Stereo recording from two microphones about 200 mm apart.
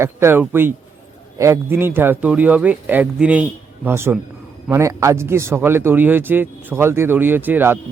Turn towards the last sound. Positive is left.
turn(degrees=-10)  # may be behind; listen again after turning